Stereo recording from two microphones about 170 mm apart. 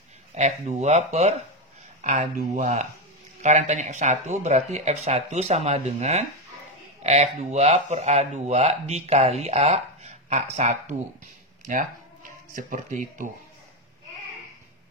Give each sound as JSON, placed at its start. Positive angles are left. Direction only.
{"t": 0.3, "sound": "speech", "side_deg": -45}